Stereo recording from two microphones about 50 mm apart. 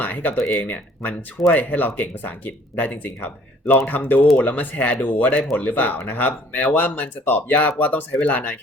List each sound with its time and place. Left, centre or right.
0.0 s speech: left